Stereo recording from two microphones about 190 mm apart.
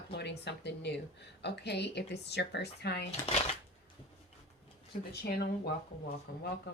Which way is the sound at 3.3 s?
35° left (ahead or behind).